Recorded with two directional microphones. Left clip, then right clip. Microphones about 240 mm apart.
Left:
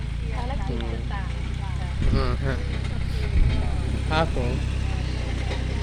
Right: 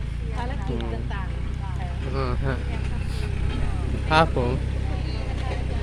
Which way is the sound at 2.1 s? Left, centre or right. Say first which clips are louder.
Even; centre.